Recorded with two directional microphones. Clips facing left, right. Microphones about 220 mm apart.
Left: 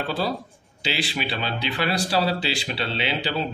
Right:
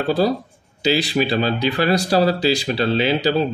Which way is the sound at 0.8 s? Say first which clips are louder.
Right 9 dB; 40° right (ahead or behind).